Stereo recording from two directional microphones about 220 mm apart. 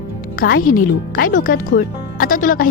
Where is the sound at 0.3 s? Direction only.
40° left (ahead or behind).